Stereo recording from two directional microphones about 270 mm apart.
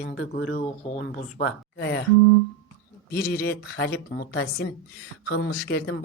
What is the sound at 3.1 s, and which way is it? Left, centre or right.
Speech, left.